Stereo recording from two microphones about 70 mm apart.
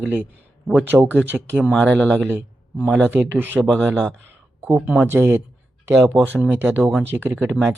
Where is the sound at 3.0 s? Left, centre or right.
Right.